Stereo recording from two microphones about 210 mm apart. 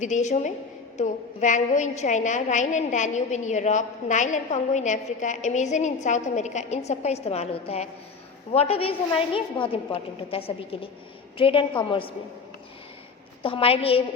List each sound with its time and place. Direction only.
0.0 s a woman's voice: 35° left (ahead or behind)
13.4 s a woman's voice: 25° left (ahead or behind)